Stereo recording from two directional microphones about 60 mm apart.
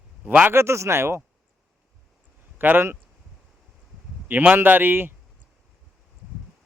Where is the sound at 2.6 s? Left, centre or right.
Right.